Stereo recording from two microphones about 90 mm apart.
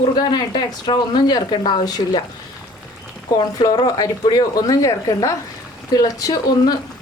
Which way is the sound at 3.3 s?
50° left (ahead or behind).